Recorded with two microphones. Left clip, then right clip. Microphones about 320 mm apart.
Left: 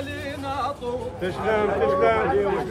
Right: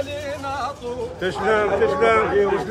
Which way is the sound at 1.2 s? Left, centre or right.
Right.